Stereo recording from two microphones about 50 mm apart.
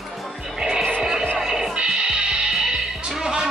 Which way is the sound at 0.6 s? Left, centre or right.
Centre.